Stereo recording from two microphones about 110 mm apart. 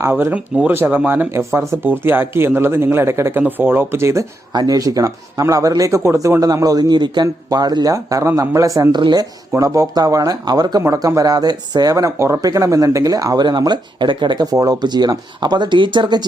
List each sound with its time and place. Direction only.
0.0 s speech: 20° right (ahead or behind)
8.9 s speech: 45° right (ahead or behind)
9.6 s speech: 30° right (ahead or behind)